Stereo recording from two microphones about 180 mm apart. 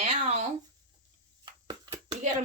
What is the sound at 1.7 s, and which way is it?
Hands, 20° right (ahead or behind).